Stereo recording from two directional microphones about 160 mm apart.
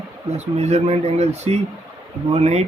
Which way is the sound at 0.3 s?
45° right (ahead or behind).